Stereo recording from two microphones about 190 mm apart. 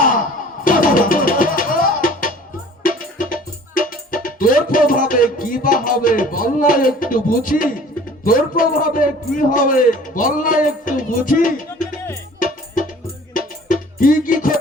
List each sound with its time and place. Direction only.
0.0 s music: 45° left (ahead or behind)
8.2 s a man's voice: 45° left (ahead or behind)
10.8 s music: 45° left (ahead or behind)
13.3 s music: 45° left (ahead or behind)